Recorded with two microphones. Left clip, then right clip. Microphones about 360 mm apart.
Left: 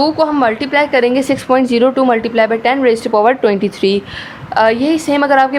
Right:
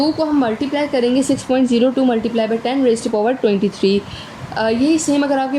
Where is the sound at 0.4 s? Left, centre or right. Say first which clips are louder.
Left 6 dB; left.